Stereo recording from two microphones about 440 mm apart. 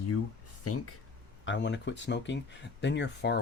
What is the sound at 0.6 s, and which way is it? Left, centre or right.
Speech, left.